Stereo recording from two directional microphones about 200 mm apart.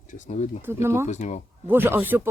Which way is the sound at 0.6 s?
10° right (ahead or behind).